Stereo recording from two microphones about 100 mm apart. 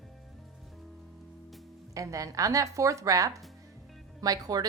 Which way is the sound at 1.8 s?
35° right (ahead or behind).